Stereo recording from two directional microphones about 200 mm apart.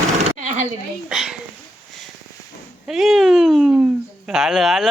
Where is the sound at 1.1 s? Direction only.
5° right (ahead or behind).